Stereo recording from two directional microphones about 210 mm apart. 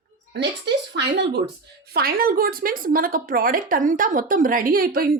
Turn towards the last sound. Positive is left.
turn(degrees=-45)  # may be behind; listen again after turning